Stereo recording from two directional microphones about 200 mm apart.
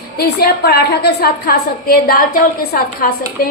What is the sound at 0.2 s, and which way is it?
A woman's voice, 50° left (ahead or behind).